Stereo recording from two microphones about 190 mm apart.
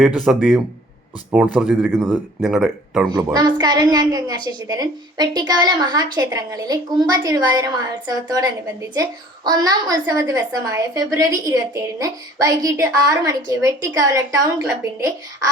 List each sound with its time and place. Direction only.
0.3 s speech: 5° right (ahead or behind)
3.3 s a woman's voice: 20° right (ahead or behind)